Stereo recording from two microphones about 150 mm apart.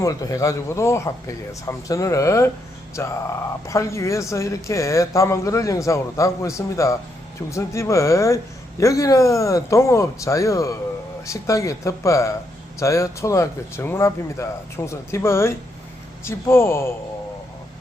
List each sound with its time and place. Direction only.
0.0 s speech: 25° left (ahead or behind)